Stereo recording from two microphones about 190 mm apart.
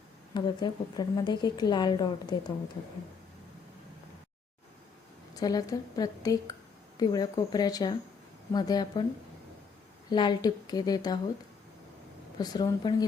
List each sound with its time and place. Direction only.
0.3 s a woman's voice: 25° left (ahead or behind)
5.3 s a woman's voice: 20° left (ahead or behind)
10.1 s a woman's voice: 25° left (ahead or behind)
12.4 s a woman's voice: 20° left (ahead or behind)